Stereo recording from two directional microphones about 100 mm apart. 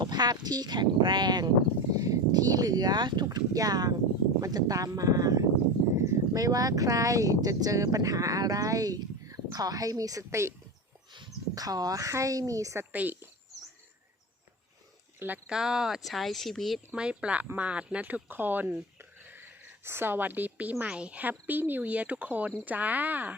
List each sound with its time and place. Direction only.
0.0 s speech: 45° right (ahead or behind)
3.2 s speech: 35° right (ahead or behind)
11.5 s speech: 40° right (ahead or behind)
12.9 s speech: 15° right (ahead or behind)
15.4 s speech: 5° right (ahead or behind)
16.9 s speech: 10° right (ahead or behind)